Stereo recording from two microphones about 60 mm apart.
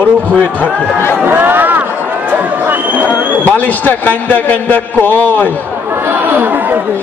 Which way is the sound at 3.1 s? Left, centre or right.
Left.